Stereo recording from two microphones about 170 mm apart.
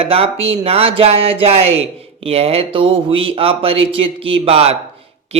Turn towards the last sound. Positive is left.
turn(degrees=-35)  # may be behind; listen again after turning